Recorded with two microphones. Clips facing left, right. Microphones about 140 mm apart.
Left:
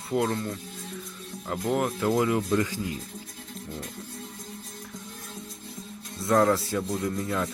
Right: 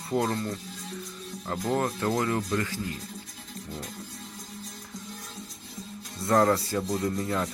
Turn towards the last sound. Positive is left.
turn(degrees=0)  # may be behind; listen again after turning